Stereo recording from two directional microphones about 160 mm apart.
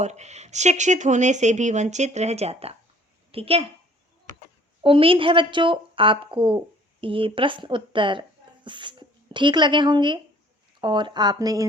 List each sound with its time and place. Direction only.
0.0 s a woman's voice: 45° right (ahead or behind)
4.8 s a woman's voice: 35° right (ahead or behind)